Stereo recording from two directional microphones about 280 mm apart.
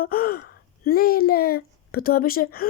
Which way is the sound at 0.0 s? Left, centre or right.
Left.